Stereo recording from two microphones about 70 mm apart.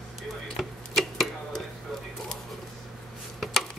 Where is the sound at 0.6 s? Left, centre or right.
Centre.